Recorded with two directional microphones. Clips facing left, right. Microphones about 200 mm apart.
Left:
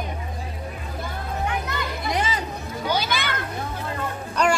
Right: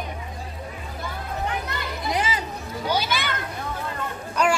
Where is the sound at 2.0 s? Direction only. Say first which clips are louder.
Even; 5° right (ahead or behind).